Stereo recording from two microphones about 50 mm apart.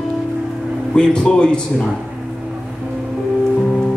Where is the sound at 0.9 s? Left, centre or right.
Centre.